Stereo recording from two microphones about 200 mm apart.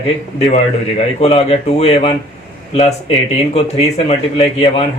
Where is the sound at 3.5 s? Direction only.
30° left (ahead or behind).